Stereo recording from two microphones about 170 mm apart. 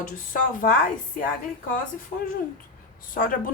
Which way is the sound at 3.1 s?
55° left (ahead or behind).